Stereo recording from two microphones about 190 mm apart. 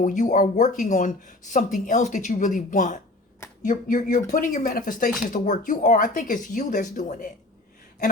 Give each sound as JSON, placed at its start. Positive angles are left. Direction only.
{"t": 0.0, "sound": "speech", "side_deg": 40}